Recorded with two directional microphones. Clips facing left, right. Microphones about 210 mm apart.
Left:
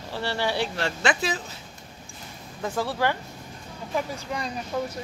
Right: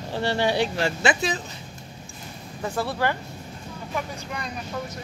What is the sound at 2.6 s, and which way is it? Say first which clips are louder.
Speech: even; 10° right (ahead or behind).